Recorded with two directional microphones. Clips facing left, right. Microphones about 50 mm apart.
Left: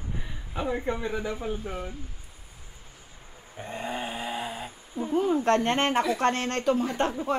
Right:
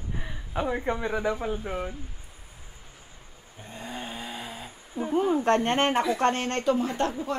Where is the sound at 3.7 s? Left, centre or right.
Left.